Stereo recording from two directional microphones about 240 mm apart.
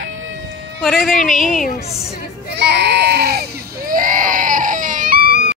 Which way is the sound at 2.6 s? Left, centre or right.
Right.